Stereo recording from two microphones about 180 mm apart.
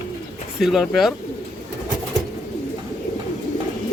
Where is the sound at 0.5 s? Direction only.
Centre (ahead or behind).